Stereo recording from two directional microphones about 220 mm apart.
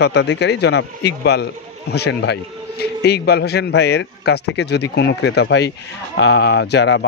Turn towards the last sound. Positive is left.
turn(degrees=50)  # may be behind; listen again after turning